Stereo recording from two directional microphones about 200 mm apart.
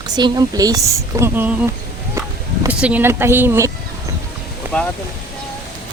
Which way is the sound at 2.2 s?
10° right (ahead or behind).